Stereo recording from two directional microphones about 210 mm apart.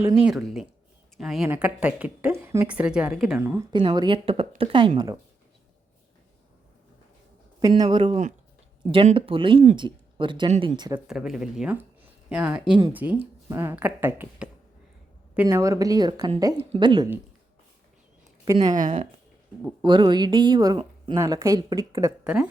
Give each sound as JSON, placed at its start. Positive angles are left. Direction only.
{"t": 0.0, "sound": "speech", "side_deg": -10}
{"t": 3.7, "sound": "a woman's voice", "side_deg": -20}
{"t": 7.6, "sound": "a woman's voice", "side_deg": -20}
{"t": 10.5, "sound": "speech", "side_deg": -35}
{"t": 10.9, "sound": "a woman's voice", "side_deg": -5}
{"t": 18.4, "sound": "a woman's voice", "side_deg": -20}
{"t": 19.8, "sound": "a woman's voice", "side_deg": -20}
{"t": 22.2, "sound": "speech", "side_deg": -5}